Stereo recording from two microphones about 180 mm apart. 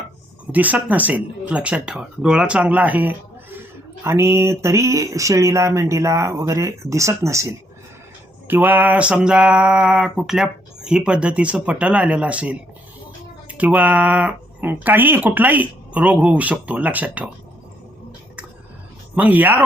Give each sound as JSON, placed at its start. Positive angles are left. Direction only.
{"t": 0.5, "sound": "speech", "side_deg": -10}
{"t": 8.4, "sound": "a sound", "side_deg": -10}
{"t": 13.5, "sound": "speech", "side_deg": -10}
{"t": 19.1, "sound": "speech", "side_deg": -10}